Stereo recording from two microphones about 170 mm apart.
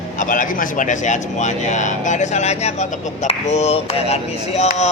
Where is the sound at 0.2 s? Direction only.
50° left (ahead or behind).